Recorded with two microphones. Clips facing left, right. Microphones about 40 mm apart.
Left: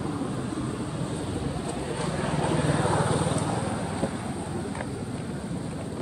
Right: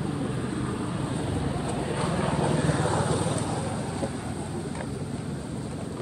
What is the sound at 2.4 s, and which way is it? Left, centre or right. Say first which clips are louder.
Vehicle: left 3 dB; centre.